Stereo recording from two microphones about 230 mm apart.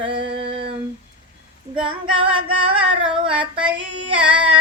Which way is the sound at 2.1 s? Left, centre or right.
Right.